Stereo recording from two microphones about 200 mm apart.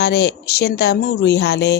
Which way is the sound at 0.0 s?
55° left (ahead or behind).